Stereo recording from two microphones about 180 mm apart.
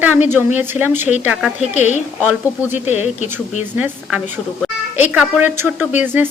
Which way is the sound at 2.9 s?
40° left (ahead or behind).